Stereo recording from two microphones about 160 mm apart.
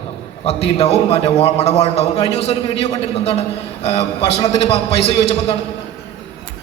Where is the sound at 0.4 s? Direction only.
40° left (ahead or behind).